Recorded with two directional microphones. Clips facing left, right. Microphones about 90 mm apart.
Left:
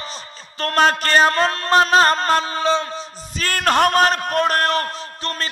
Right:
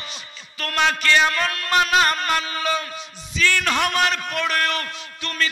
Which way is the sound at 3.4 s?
45° left (ahead or behind).